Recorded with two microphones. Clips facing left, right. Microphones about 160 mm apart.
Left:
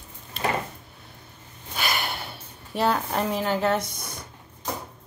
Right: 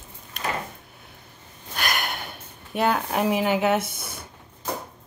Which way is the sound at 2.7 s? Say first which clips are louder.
Right 1 dB; 5° right (ahead or behind).